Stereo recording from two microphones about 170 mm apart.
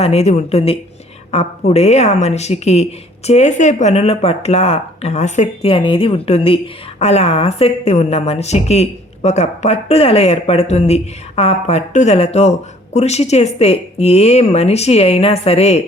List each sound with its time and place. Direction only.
0.0 s a woman's voice: 40° left (ahead or behind)